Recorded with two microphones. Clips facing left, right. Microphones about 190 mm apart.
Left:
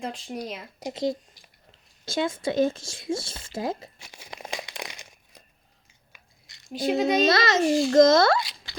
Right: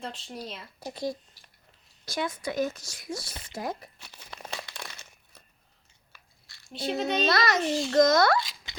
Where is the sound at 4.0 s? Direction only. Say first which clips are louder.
Left 3 dB; 10° left (ahead or behind).